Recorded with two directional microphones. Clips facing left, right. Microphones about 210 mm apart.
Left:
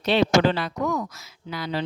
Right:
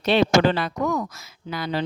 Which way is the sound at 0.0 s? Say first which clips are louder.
Right 1 dB; 55° right (ahead or behind).